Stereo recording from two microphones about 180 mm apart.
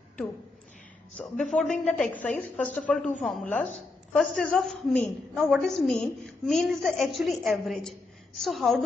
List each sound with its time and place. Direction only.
1.1 s a woman's voice: centre (ahead or behind)